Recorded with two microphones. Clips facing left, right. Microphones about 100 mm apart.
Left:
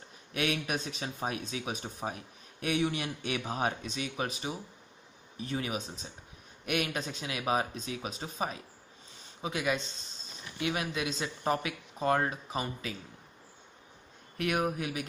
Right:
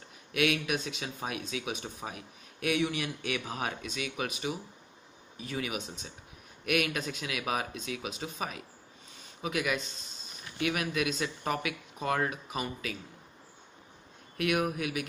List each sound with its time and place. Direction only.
0.3 s speech: 35° left (ahead or behind)
14.4 s speech: 30° left (ahead or behind)